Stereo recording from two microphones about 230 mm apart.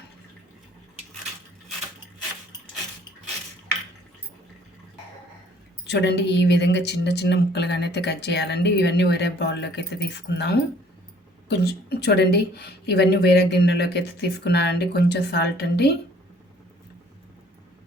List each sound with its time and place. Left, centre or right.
5.8 s a woman's voice: left